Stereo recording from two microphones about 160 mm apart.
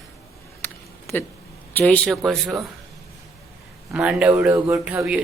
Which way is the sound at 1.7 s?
10° left (ahead or behind).